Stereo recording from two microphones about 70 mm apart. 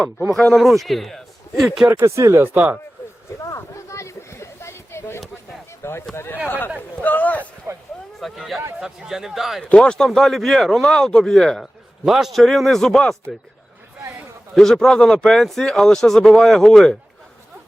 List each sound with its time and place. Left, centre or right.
0.5 s speech: centre
1.9 s speech: right
2.4 s speech: right
3.5 s a sound: left
5.8 s speech: left
7.7 s speech: right
8.2 s speech: centre
9.7 s speech: centre
14.5 s speech: centre